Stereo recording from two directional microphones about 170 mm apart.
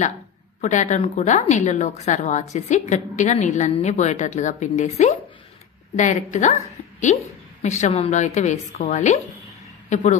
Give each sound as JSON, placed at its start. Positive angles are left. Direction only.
{"t": 0.6, "sound": "a woman's voice", "side_deg": 45}
{"t": 7.6, "sound": "a woman's voice", "side_deg": 45}